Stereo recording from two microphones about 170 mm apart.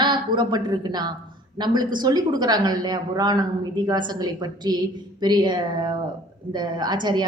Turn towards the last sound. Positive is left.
turn(degrees=-25)  # may be behind; listen again after turning